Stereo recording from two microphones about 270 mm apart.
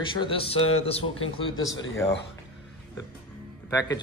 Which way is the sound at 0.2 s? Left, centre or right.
Centre.